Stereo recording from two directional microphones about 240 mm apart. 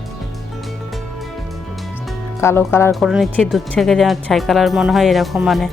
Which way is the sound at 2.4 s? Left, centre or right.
Centre.